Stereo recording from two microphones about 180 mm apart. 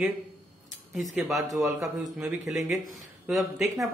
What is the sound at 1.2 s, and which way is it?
Speech, centre (ahead or behind).